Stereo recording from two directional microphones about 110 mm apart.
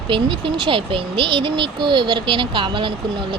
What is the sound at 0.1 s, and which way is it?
Speech, 50° right (ahead or behind).